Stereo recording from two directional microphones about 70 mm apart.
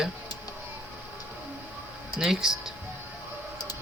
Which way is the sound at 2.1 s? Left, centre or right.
Centre.